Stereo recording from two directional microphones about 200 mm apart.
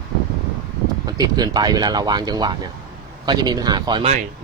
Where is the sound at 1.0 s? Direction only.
20° right (ahead or behind).